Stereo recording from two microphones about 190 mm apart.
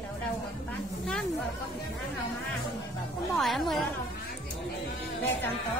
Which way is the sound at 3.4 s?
Centre (ahead or behind).